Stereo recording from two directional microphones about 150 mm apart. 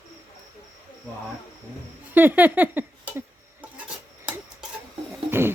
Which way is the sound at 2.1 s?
10° right (ahead or behind).